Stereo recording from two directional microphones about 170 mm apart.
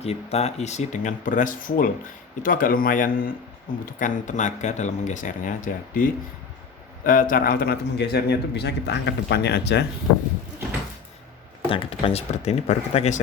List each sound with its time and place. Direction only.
0.0 s a man's voice: 40° left (ahead or behind); by 9.8 s 80° left
11.7 s speech: 35° left (ahead or behind)